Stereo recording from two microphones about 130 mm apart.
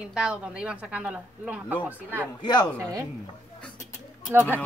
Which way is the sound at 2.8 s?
25° right (ahead or behind).